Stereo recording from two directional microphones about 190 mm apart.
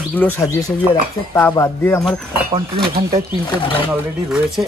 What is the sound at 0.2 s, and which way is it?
Speech, 15° left (ahead or behind).